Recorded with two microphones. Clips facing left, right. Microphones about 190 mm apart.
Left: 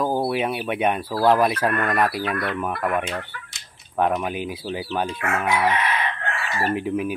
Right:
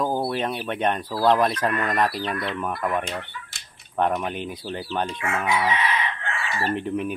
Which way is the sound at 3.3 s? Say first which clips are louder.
Even; 65° left (ahead or behind).